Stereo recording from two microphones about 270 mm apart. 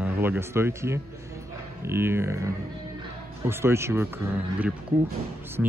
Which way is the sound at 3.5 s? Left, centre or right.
Centre.